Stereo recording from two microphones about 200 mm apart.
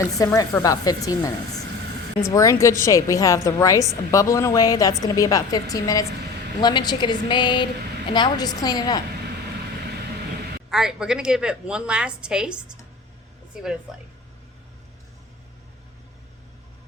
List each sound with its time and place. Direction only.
0.2 s a woman's voice: 15° left (ahead or behind)
10.7 s a woman's voice: 5° right (ahead or behind)